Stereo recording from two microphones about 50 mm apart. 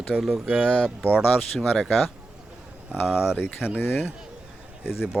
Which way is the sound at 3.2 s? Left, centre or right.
Left.